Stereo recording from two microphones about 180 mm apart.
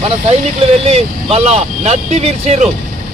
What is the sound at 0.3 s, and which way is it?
Speech, 35° right (ahead or behind).